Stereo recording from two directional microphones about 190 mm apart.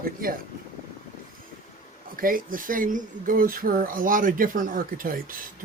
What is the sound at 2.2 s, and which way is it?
Speech, 45° right (ahead or behind).